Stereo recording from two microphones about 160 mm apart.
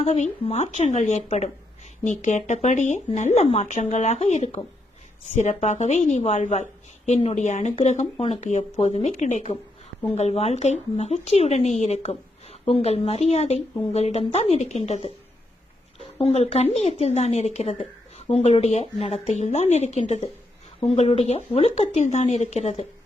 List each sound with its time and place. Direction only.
0.0 s a woman's voice: 40° left (ahead or behind)
16.1 s a woman's voice: 40° left (ahead or behind)